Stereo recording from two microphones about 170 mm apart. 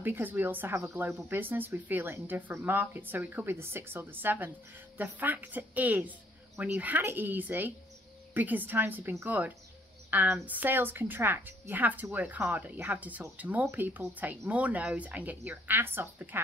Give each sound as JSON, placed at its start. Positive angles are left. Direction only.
{"t": 0.0, "sound": "a woman's voice", "side_deg": -10}